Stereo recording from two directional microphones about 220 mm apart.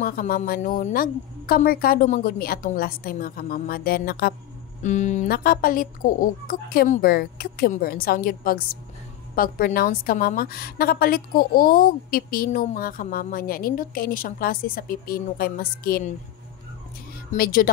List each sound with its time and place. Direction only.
0.0 s a woman's voice: 40° left (ahead or behind)
17.3 s a woman's voice: 40° left (ahead or behind)